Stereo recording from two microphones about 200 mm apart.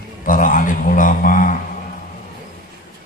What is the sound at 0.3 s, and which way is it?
A man's voice, 40° left (ahead or behind).